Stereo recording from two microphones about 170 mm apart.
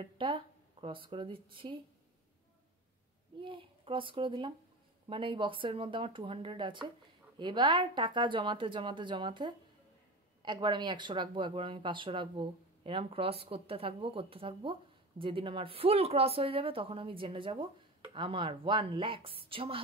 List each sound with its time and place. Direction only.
0.0 s speech: 30° right (ahead or behind)
3.3 s speech: 30° right (ahead or behind)